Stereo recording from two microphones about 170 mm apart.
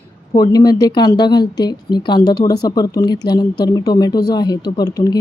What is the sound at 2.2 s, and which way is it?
Speech, 70° left (ahead or behind).